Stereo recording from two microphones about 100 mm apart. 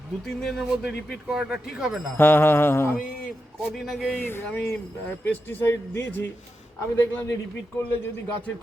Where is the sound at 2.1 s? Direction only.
20° left (ahead or behind).